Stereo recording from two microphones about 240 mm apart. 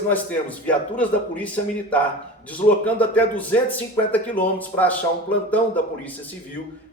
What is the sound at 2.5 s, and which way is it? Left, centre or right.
Speech, centre.